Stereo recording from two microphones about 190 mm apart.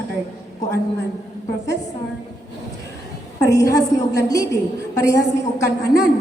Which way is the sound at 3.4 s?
15° left (ahead or behind).